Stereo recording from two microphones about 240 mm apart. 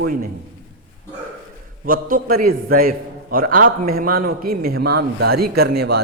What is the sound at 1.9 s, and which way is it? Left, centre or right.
A man's voice, right.